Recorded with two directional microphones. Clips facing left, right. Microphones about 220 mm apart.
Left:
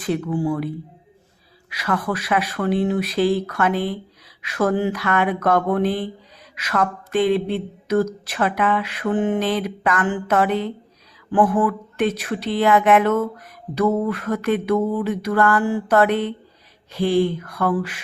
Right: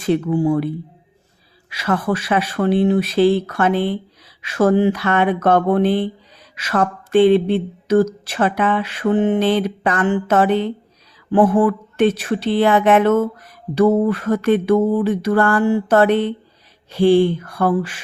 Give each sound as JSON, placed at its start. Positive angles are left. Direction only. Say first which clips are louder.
{"t": 0.0, "sound": "speech", "louder": "right 5 dB", "side_deg": -25}
{"t": 1.7, "sound": "speech", "louder": "right 4 dB", "side_deg": -25}